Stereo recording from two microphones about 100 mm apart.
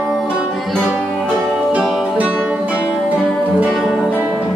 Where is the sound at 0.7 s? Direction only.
5° left (ahead or behind).